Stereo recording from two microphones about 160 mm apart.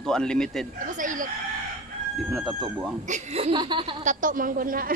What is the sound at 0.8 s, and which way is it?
Speech, 55° right (ahead or behind).